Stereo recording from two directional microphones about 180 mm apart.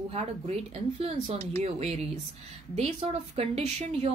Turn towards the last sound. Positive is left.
turn(degrees=-35)  # may be behind; listen again after turning